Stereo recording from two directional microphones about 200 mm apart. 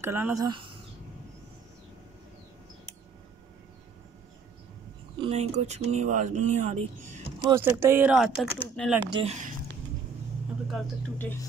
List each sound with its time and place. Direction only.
0.0 s speech: 10° right (ahead or behind)
5.2 s speech: 30° right (ahead or behind)
7.4 s speech: 15° right (ahead or behind)
9.1 s speech: 30° right (ahead or behind)